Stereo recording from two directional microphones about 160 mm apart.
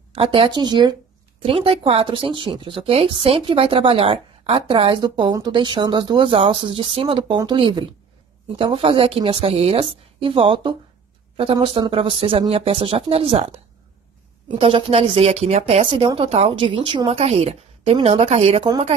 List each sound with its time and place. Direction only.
0.1 s speech: 35° right (ahead or behind)
14.6 s speech: 35° right (ahead or behind)